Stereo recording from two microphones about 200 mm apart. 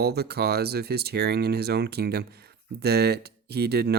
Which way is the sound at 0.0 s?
55° right (ahead or behind).